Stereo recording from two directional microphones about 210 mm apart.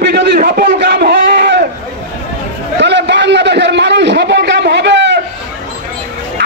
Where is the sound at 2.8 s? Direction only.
55° right (ahead or behind).